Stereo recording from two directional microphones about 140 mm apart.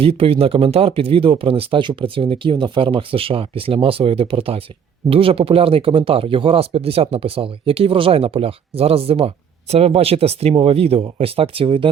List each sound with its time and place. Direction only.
0.0 s speech: 45° right (ahead or behind)